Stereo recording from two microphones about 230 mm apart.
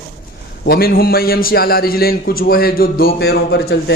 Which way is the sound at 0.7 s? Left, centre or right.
Left.